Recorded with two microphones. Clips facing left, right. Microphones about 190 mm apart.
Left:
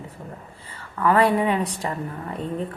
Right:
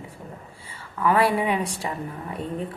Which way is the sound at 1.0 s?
10° right (ahead or behind).